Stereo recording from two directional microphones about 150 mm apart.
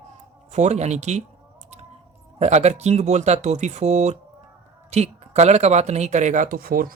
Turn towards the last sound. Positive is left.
turn(degrees=-75)  # may be behind; listen again after turning